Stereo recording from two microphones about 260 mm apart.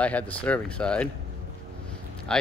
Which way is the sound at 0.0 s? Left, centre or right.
Centre.